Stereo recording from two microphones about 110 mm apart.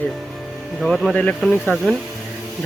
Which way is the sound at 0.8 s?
Centre (ahead or behind).